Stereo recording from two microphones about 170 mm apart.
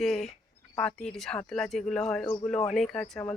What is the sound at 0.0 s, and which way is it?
Speech, centre (ahead or behind).